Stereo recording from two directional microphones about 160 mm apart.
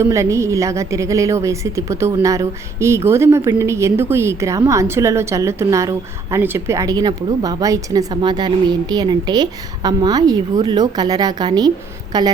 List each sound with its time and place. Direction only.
0.0 s a woman's voice: 20° right (ahead or behind)